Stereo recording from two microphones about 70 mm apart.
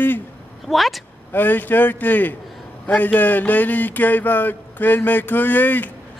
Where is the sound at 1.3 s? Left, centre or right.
Left.